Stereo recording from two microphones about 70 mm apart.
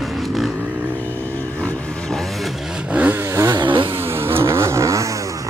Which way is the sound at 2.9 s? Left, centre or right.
Right.